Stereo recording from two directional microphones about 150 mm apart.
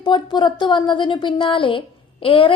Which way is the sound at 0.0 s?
30° left (ahead or behind).